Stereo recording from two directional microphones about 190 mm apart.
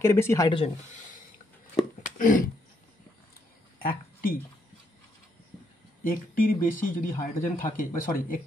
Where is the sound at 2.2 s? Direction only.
45° left (ahead or behind).